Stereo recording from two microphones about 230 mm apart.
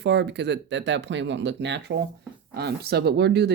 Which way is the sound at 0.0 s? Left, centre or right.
Right.